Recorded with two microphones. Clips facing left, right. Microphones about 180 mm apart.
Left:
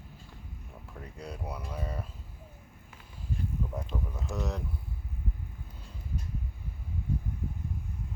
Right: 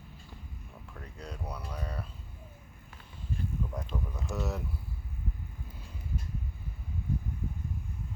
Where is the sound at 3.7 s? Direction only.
Centre (ahead or behind).